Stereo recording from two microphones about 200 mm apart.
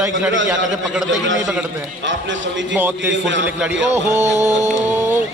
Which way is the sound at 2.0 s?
65° right (ahead or behind).